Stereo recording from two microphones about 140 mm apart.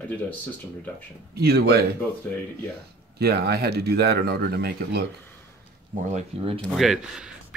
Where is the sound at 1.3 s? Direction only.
90° right.